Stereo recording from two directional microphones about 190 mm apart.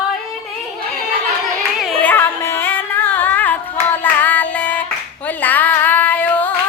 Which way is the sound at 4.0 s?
10° left (ahead or behind).